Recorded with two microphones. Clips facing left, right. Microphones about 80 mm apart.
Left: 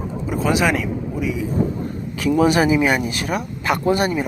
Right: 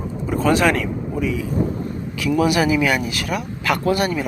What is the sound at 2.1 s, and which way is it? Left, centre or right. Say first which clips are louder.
Speech: left 2 dB; left.